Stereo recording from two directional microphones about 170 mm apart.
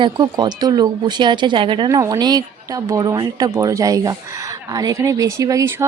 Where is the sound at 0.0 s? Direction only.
25° right (ahead or behind).